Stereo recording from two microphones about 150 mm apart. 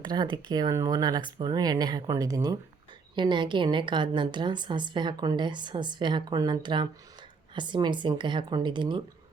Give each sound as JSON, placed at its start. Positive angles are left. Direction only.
{"t": 0.0, "sound": "a woman's voice", "side_deg": -30}